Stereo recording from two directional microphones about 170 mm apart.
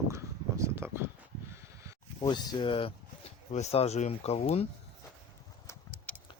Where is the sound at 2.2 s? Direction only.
25° left (ahead or behind).